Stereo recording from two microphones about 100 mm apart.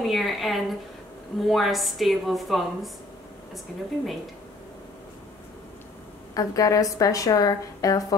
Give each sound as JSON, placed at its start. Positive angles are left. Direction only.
{"t": 0.0, "sound": "a woman's voice", "side_deg": 0}
{"t": 6.3, "sound": "a woman's voice", "side_deg": 35}